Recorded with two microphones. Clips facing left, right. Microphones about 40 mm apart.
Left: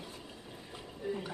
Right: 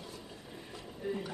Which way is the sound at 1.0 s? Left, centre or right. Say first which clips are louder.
Even; centre.